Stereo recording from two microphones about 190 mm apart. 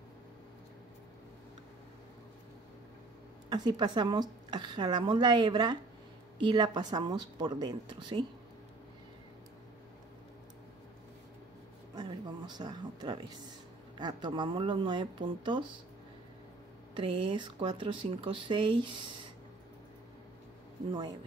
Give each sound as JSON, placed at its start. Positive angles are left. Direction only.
{"t": 3.4, "sound": "a woman's voice", "side_deg": -20}
{"t": 11.9, "sound": "a sound", "side_deg": -20}
{"t": 13.9, "sound": "a woman's voice", "side_deg": -25}
{"t": 16.9, "sound": "a woman's voice", "side_deg": -25}